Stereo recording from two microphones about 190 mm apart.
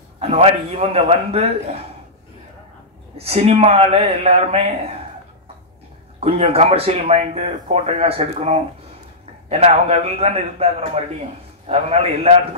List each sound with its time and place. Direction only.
0.2 s speech: 30° right (ahead or behind)
3.2 s speech: 30° right (ahead or behind)
6.1 s speech: 30° right (ahead or behind)